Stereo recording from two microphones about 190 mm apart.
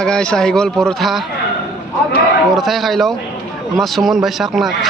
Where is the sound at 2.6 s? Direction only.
Centre (ahead or behind).